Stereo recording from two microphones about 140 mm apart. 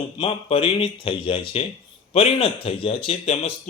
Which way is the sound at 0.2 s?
40° left (ahead or behind).